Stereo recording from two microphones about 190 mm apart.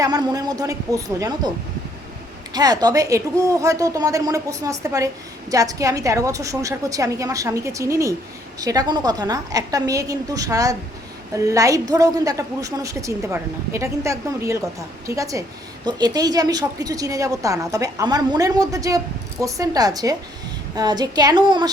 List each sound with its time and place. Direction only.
0.0 s a woman's voice: 20° right (ahead or behind)